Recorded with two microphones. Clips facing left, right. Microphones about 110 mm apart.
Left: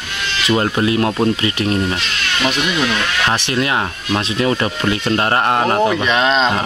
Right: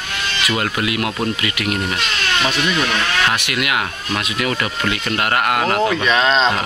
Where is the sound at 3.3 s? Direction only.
30° left (ahead or behind); by 6.6 s 15° left (ahead or behind).